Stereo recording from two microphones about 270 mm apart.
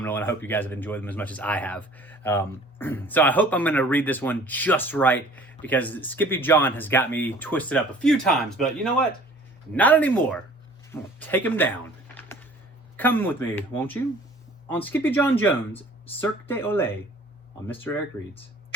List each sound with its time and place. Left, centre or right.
0.0 s speech: centre
12.1 s a sound: centre
13.0 s speech: centre